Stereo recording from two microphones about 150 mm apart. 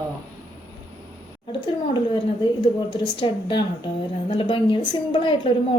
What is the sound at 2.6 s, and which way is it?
A woman's voice, 30° left (ahead or behind).